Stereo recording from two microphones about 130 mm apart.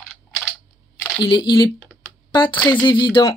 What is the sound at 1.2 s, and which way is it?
A woman's voice, 35° left (ahead or behind).